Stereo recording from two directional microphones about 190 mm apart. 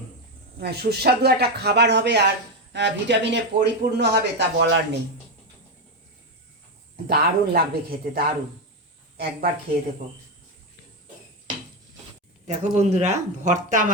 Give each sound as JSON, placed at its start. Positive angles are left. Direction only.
{"t": 0.6, "sound": "speech", "side_deg": -55}
{"t": 7.1, "sound": "speech", "side_deg": -50}
{"t": 12.5, "sound": "speech", "side_deg": -35}